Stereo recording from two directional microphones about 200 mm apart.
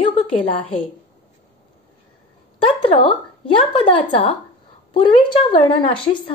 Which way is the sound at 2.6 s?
25° left (ahead or behind).